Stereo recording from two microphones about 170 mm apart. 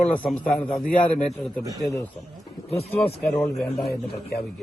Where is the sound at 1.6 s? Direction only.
20° right (ahead or behind).